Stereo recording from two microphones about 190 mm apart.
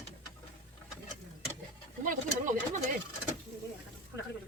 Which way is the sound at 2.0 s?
45° right (ahead or behind).